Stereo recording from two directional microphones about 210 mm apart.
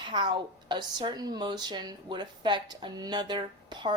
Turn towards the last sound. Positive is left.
turn(degrees=-20)  # may be behind; listen again after turning